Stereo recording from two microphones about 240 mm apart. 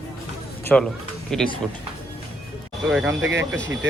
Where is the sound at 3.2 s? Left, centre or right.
Right.